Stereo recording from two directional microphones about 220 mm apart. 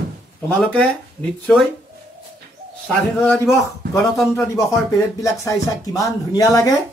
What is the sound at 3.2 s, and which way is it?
Speech, 10° left (ahead or behind).